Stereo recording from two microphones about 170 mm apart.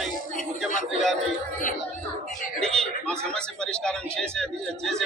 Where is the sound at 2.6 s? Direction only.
5° left (ahead or behind).